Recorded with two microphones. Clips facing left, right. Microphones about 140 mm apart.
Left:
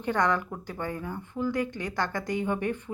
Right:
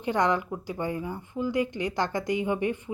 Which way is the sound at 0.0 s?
15° right (ahead or behind).